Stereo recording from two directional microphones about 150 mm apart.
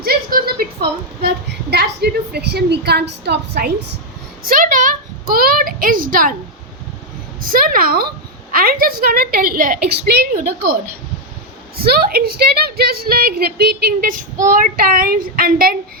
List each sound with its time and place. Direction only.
0.0 s a sound: 85° right
1.7 s a woman's voice: 90° right
4.4 s a woman's voice: 70° right (ahead or behind)
7.5 s a woman's voice: 75° right (ahead or behind)
11.8 s a woman's voice: 90° right
14.4 s a woman's voice: 65° right (ahead or behind)